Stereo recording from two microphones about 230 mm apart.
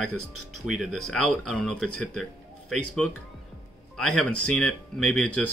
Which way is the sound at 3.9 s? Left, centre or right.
Centre.